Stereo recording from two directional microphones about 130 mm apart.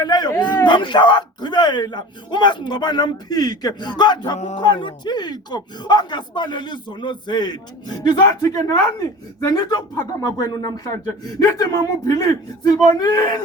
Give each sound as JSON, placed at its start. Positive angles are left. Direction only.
{"t": 0.0, "sound": "speech", "side_deg": 30}
{"t": 4.4, "sound": "speech", "side_deg": 60}
{"t": 4.6, "sound": "speech", "side_deg": 35}